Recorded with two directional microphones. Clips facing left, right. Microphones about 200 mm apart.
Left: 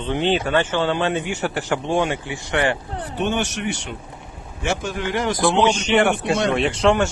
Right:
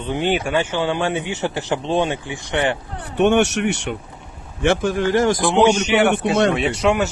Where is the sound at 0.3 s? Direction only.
10° right (ahead or behind).